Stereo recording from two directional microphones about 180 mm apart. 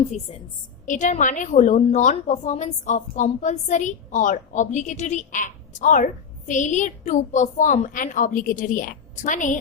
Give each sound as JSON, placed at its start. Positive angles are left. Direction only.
{"t": 0.1, "sound": "a woman's voice", "side_deg": 35}